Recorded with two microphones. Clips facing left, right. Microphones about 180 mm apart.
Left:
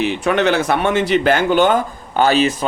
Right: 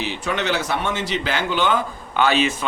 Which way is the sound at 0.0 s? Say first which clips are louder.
Left 8 dB; 55° left (ahead or behind).